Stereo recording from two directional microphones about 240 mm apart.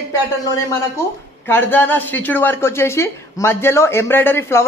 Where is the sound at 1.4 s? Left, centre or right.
Centre.